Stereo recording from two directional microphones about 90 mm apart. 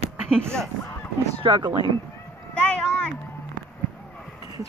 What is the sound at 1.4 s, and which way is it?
Speech, 60° right (ahead or behind).